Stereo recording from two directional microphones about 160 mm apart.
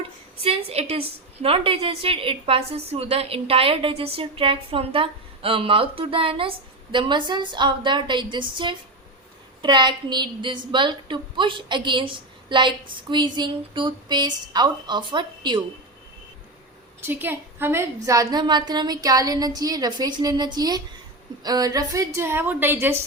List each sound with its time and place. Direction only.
0.3 s a woman's voice: 35° right (ahead or behind)
17.0 s a woman's voice: 15° right (ahead or behind)